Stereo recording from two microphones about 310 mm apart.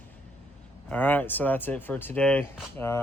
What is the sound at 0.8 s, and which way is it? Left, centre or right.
Speech, centre.